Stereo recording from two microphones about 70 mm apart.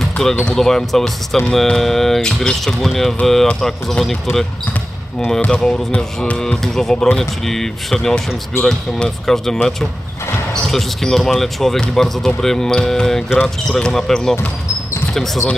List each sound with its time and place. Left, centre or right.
0.2 s speech: centre
5.5 s speech: centre